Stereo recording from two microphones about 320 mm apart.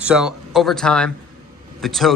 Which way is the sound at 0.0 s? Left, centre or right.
Centre.